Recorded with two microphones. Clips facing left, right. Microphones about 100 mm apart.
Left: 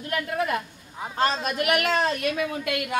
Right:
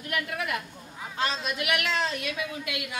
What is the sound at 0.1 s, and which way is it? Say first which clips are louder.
A woman's voice: left 5 dB; 35° left (ahead or behind).